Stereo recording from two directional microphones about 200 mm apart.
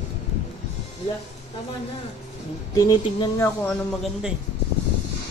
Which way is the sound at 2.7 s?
20° left (ahead or behind).